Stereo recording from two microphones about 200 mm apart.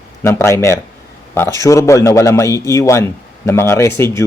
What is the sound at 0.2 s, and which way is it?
Speech, 15° left (ahead or behind).